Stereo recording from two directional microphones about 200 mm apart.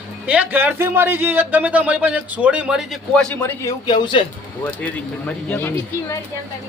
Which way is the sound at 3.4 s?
15° left (ahead or behind).